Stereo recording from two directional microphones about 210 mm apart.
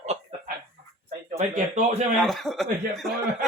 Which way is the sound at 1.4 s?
30° right (ahead or behind).